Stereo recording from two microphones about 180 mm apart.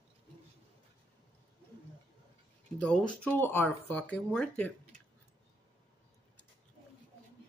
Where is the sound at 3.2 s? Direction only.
10° left (ahead or behind).